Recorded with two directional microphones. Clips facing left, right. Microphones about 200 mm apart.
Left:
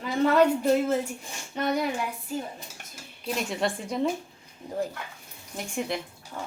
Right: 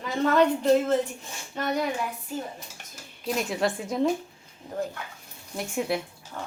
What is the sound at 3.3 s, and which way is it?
Speech, centre (ahead or behind).